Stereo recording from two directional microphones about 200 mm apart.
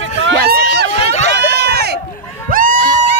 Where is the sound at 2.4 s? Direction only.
45° right (ahead or behind).